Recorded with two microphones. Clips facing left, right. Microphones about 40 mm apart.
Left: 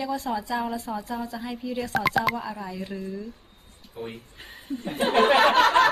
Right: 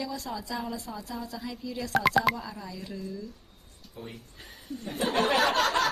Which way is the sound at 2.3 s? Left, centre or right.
Left.